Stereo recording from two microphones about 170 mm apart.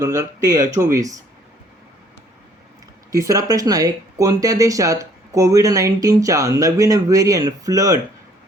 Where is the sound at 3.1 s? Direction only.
20° right (ahead or behind).